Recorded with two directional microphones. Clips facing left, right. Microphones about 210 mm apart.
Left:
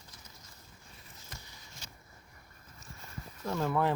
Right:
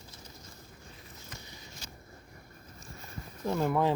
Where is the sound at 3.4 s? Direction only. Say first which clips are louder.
Right 3 dB; 15° right (ahead or behind).